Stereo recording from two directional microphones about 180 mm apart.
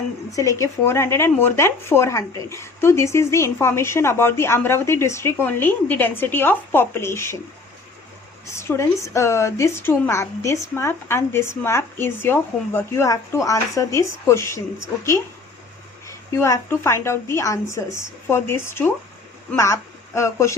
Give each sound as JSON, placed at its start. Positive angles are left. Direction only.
{"t": 0.3, "sound": "speech", "side_deg": 20}
{"t": 8.5, "sound": "speech", "side_deg": 15}
{"t": 16.0, "sound": "speech", "side_deg": 15}